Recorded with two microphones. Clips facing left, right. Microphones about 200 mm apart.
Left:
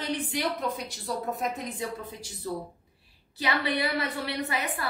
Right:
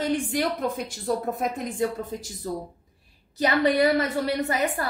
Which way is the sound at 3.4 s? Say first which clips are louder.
Right 8 dB; 45° right (ahead or behind).